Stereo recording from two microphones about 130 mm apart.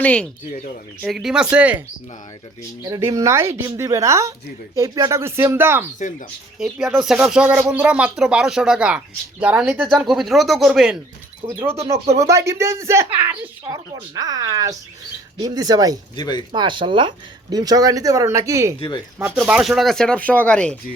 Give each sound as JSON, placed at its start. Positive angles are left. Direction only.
{"t": 0.0, "sound": "speech", "side_deg": 10}
{"t": 1.0, "sound": "speech", "side_deg": 0}
{"t": 2.8, "sound": "speech", "side_deg": -25}
{"t": 6.0, "sound": "speech", "side_deg": 70}
{"t": 6.6, "sound": "speech", "side_deg": -5}
{"t": 11.4, "sound": "speech", "side_deg": -30}
{"t": 16.1, "sound": "speech", "side_deg": 35}
{"t": 16.6, "sound": "speech", "side_deg": -35}
{"t": 19.5, "sound": "speech", "side_deg": 0}